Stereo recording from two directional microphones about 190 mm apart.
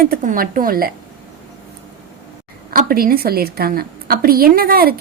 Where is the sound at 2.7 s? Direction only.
50° right (ahead or behind).